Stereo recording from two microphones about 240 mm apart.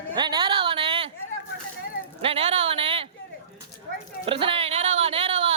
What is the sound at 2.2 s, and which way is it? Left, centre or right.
Speech, right.